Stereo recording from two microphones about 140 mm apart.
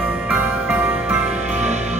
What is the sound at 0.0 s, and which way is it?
Music, 10° right (ahead or behind).